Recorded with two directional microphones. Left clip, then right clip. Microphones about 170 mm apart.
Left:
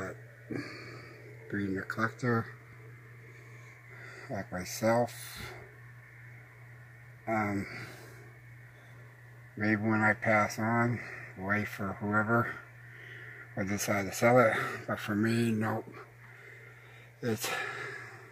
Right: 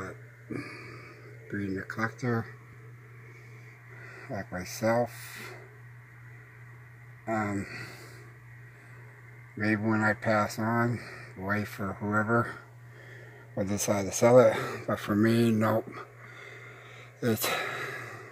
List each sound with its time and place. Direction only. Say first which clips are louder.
0.0 s a sound: even; centre (ahead or behind)
1.5 s speech: even; centre (ahead or behind)
4.0 s speech: right 1 dB; centre (ahead or behind)
7.2 s speech: right 1 dB; 5° right (ahead or behind)
9.6 s speech: right 1 dB; 10° right (ahead or behind)
10.0 s speech: left 1 dB; 25° right (ahead or behind)
10.6 s speech: right 1 dB; 10° right (ahead or behind)
11.0 s speech: even; 20° right (ahead or behind)
11.8 s speech: right 1 dB; 10° right (ahead or behind)
13.6 s speech: right 3 dB; 25° right (ahead or behind)
15.3 s speech: right 6 dB; 50° right (ahead or behind)
17.2 s a sound: right 4 dB; 55° right (ahead or behind)